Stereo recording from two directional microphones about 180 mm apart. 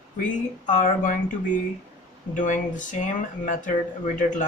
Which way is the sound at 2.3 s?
45° left (ahead or behind).